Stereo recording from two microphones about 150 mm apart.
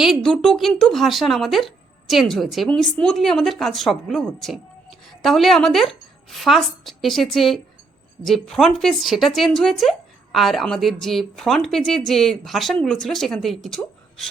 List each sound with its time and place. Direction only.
0.0 s speech: centre (ahead or behind)